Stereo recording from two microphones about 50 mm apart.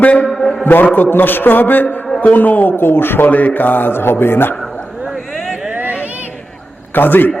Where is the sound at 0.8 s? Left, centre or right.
Left.